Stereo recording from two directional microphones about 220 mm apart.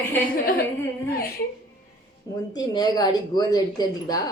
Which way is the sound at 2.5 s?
20° left (ahead or behind).